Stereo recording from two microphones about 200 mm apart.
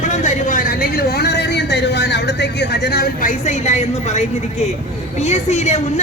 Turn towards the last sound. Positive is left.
turn(degrees=35)  # may be behind; listen again after turning